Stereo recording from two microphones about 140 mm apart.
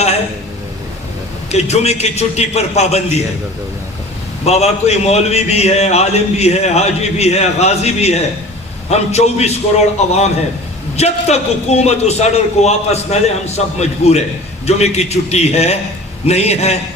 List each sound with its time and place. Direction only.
1.5 s a man's voice: 50° left (ahead or behind)
4.4 s a man's voice: 50° left (ahead or behind)